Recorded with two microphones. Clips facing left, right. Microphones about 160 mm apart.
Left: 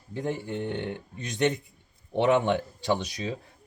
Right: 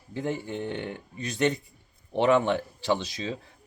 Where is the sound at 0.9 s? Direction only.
20° left (ahead or behind).